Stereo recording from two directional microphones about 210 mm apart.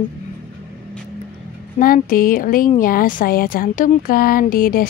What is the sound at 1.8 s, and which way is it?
A woman's voice, 40° left (ahead or behind).